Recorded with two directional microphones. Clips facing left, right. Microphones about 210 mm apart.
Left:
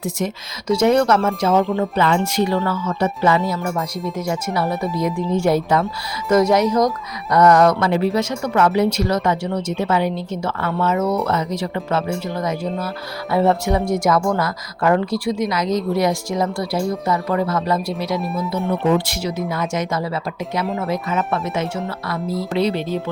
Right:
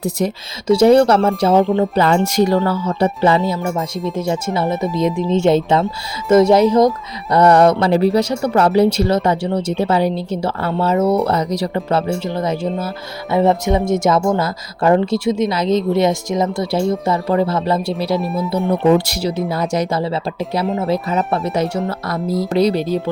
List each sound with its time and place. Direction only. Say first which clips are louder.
0.2 s speech: right 4 dB; 35° right (ahead or behind)
3.3 s speech: right 2 dB; 30° right (ahead or behind)
4.6 s speech: right 3 dB; centre (ahead or behind)
5.1 s speech: right 4 dB; 20° right (ahead or behind)
13.3 s speech: right 2 dB; 20° right (ahead or behind)
18.2 s speech: right 3 dB; centre (ahead or behind)
18.9 s speech: right 5 dB; 40° right (ahead or behind)